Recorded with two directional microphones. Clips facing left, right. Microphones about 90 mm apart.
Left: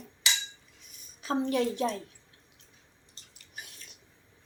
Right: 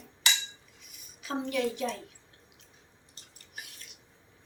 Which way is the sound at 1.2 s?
35° left (ahead or behind).